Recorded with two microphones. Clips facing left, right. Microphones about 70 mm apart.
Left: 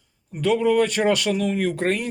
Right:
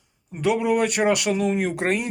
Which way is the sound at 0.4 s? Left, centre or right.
Centre.